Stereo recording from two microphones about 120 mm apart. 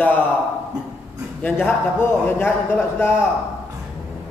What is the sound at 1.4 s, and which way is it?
A man's voice, 15° left (ahead or behind).